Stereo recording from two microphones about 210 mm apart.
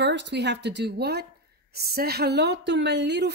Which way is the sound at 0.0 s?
55° right (ahead or behind).